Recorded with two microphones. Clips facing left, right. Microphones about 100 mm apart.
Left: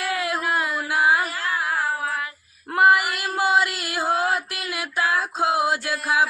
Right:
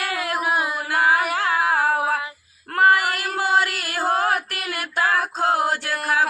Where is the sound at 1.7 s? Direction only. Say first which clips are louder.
Right 4 dB; 65° right (ahead or behind).